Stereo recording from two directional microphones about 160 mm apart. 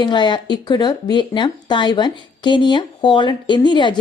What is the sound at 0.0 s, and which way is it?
Speech, 30° left (ahead or behind).